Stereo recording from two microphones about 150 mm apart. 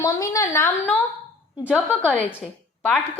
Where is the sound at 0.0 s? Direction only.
20° left (ahead or behind).